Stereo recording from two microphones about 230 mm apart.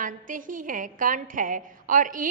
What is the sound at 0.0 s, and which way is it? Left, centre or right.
A woman's voice, right.